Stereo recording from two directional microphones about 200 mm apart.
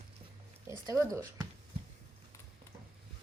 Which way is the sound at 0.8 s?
15° right (ahead or behind).